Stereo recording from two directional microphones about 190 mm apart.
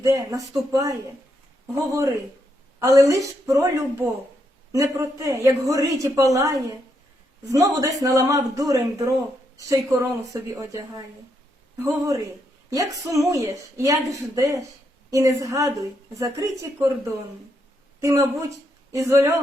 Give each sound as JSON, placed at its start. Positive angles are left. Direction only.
{"t": 0.0, "sound": "speech", "side_deg": -15}
{"t": 18.0, "sound": "speech", "side_deg": -15}